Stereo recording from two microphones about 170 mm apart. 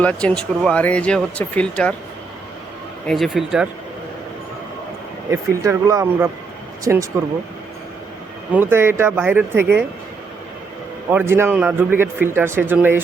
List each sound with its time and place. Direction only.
0.0 s speech: 5° left (ahead or behind)
3.1 s speech: centre (ahead or behind)
5.3 s a man's voice: 20° right (ahead or behind)
8.5 s a man's voice: 15° right (ahead or behind)
11.1 s a man's voice: 15° right (ahead or behind)